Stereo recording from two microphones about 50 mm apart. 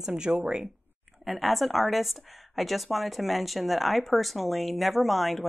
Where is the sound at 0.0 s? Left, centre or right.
Centre.